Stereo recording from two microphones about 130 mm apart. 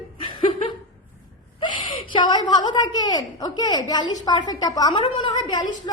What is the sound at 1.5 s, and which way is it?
A woman's voice, 40° left (ahead or behind).